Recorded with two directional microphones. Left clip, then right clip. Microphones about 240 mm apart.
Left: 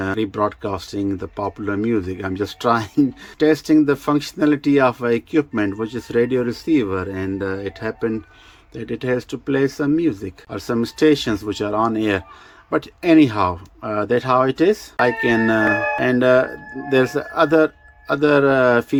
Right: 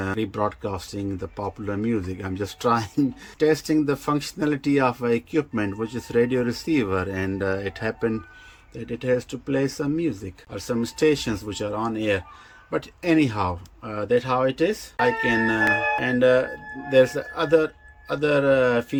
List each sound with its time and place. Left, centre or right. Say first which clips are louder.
0.0 s speech: left 5 dB; centre
8.7 s speech: left 2 dB; centre